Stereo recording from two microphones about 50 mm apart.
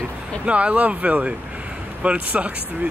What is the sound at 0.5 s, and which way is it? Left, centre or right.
Speech, right.